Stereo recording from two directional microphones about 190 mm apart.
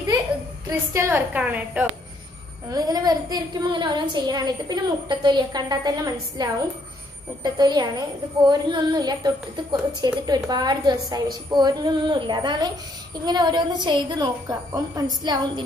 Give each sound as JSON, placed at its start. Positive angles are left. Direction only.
{"t": 0.7, "sound": "a woman's voice", "side_deg": -15}
{"t": 2.7, "sound": "a woman's voice", "side_deg": -20}